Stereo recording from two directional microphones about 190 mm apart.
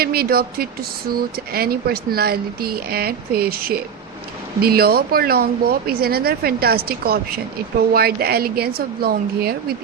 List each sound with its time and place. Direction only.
0.0 s speech: 55° right (ahead or behind)